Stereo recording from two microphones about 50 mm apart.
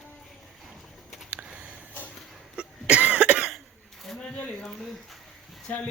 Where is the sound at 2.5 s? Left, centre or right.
Right.